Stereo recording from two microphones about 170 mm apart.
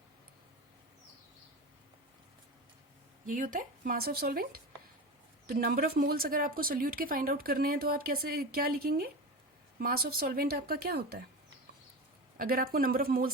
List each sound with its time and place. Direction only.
3.2 s speech: 50° right (ahead or behind)
5.6 s speech: 60° right (ahead or behind)
12.4 s speech: 55° right (ahead or behind)